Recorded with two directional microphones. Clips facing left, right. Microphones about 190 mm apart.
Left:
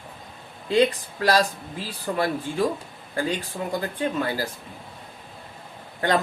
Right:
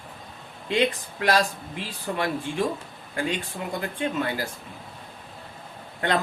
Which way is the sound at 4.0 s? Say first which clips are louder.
Even; 35° left (ahead or behind).